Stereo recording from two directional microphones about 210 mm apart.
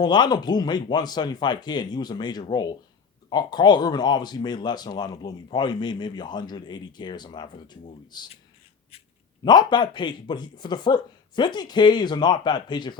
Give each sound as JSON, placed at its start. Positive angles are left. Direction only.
{"t": 0.0, "sound": "speech", "side_deg": 20}
{"t": 9.4, "sound": "speech", "side_deg": 20}